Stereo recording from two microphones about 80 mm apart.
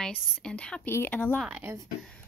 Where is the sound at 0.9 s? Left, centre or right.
Left.